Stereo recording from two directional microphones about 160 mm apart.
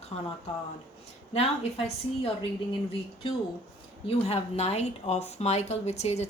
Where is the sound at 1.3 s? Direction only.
40° left (ahead or behind).